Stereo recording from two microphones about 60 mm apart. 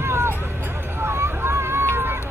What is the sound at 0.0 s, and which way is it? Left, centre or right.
Vehicle, right.